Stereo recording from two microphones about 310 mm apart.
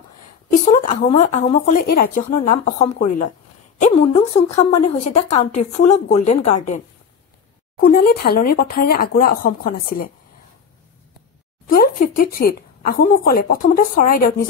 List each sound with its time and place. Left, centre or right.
0.7 s a woman's voice: left
7.8 s a woman's voice: left
11.6 s speech: left